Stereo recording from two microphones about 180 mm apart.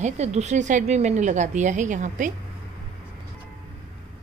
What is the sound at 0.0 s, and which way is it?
A woman's voice, 40° right (ahead or behind).